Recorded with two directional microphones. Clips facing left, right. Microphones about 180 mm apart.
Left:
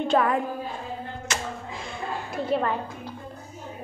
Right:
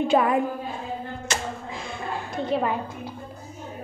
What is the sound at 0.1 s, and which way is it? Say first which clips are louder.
Speech: right 1 dB; 10° right (ahead or behind).